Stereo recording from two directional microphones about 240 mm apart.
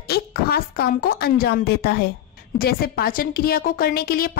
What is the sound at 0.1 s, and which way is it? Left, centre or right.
A woman's voice, left.